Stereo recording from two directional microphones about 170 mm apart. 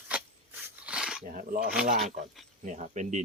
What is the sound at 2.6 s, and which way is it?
Speech, 45° right (ahead or behind).